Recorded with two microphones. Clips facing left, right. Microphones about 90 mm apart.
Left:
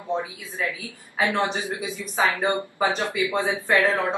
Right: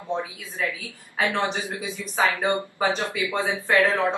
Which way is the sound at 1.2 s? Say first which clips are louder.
Left 1 dB; 20° left (ahead or behind).